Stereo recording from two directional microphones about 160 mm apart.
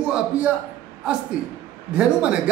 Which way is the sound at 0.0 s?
5° right (ahead or behind).